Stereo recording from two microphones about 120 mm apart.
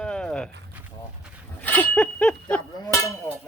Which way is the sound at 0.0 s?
5° left (ahead or behind).